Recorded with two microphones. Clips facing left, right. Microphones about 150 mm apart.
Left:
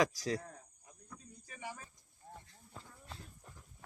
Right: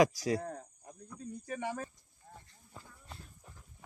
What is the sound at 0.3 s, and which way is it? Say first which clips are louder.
Cricket: right 6 dB; 55° right (ahead or behind).